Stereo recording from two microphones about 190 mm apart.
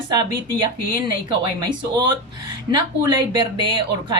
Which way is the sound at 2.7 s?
25° right (ahead or behind).